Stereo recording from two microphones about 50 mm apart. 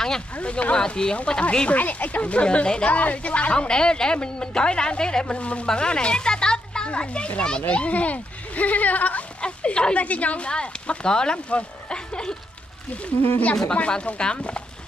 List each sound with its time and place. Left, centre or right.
0.4 s speech: left
1.7 s a child's voice: left
9.4 s speech: left
13.7 s speech: left